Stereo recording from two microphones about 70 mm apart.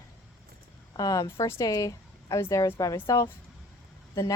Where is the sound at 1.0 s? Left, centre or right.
Left.